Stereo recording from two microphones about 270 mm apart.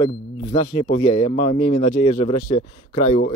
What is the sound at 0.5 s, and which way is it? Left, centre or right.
Speech, centre.